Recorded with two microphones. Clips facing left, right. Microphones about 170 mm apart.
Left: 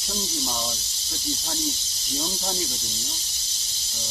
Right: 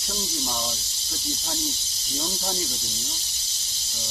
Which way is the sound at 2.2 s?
Centre (ahead or behind).